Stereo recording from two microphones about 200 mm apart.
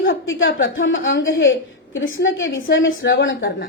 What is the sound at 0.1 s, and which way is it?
A woman's voice, 70° left (ahead or behind).